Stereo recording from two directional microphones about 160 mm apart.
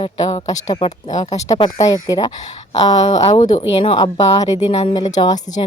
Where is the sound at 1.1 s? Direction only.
45° left (ahead or behind).